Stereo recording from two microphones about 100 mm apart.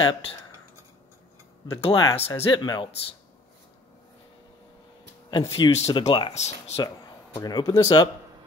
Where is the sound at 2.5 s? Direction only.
50° left (ahead or behind).